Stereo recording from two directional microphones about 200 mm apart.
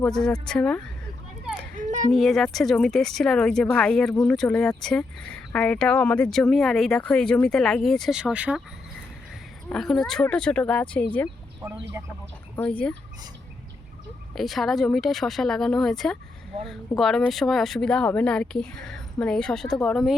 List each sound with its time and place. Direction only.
0.0 s speech: 5° left (ahead or behind)
1.7 s a sound: 40° right (ahead or behind)
2.1 s speech: centre (ahead or behind)
9.6 s speech: centre (ahead or behind)
12.0 s speech: 15° right (ahead or behind)
12.5 s fowl: 5° left (ahead or behind)
14.3 s speech: centre (ahead or behind)